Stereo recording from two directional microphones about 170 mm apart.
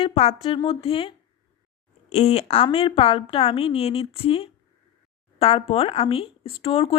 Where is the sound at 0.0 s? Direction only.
35° left (ahead or behind).